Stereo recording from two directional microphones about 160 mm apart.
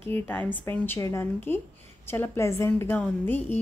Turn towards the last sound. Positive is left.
turn(degrees=15)  # may be behind; listen again after turning